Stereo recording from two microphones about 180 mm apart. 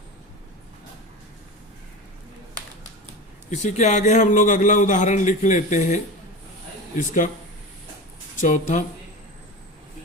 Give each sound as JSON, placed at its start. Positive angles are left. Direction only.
{"t": 3.5, "sound": "a man's voice", "side_deg": 40}
{"t": 8.4, "sound": "a man's voice", "side_deg": 45}